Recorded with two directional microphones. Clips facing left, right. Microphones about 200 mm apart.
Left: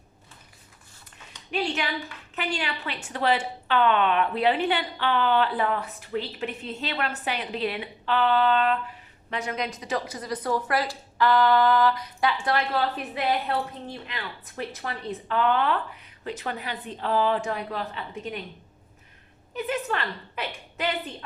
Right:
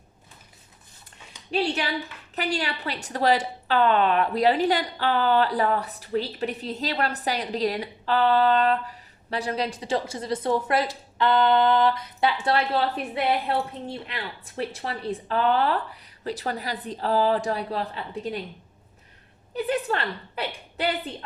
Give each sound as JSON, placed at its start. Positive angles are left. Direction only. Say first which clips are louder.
{"t": 1.5, "sound": "a woman's voice", "louder": "right 3 dB", "side_deg": -35}
{"t": 19.5, "sound": "a woman's voice", "louder": "right 3 dB", "side_deg": -35}